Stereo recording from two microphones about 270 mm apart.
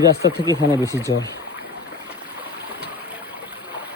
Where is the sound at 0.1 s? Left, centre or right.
Left.